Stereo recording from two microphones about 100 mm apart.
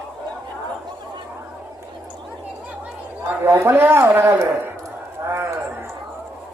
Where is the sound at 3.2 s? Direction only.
25° right (ahead or behind).